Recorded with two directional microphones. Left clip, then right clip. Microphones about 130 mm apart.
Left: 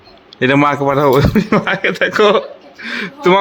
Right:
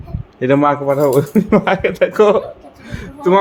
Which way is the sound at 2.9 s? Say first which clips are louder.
Left 4 dB; 15° left (ahead or behind).